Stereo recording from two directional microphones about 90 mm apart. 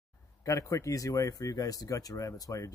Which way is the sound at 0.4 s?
35° left (ahead or behind).